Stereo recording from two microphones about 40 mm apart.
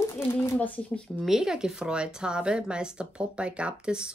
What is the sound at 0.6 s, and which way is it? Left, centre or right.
Speech, left.